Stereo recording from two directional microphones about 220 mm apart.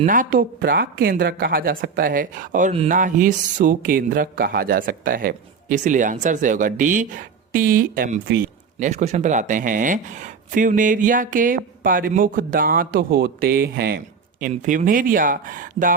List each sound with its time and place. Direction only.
0.0 s a man's voice: 35° right (ahead or behind)